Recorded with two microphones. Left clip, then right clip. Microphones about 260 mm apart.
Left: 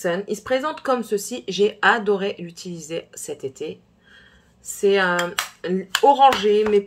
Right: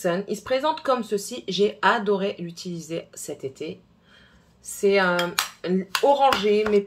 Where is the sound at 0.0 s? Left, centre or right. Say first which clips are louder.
Left 2 dB; centre.